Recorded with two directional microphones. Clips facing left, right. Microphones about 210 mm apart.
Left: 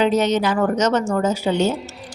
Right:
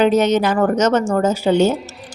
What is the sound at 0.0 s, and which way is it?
A woman's voice, 50° right (ahead or behind).